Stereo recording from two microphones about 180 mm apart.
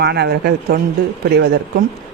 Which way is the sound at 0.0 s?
65° right (ahead or behind).